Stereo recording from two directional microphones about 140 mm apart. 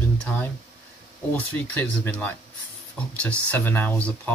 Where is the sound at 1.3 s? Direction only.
10° left (ahead or behind).